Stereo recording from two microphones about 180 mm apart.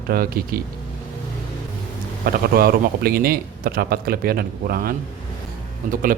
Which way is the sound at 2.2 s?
55° right (ahead or behind).